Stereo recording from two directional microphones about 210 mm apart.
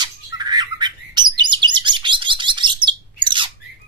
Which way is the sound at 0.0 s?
20° right (ahead or behind).